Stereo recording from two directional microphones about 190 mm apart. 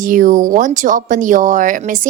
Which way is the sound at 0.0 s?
45° right (ahead or behind).